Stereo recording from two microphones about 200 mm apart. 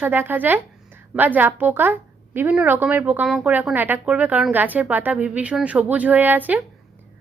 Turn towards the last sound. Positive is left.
turn(degrees=-10)  # may be behind; listen again after turning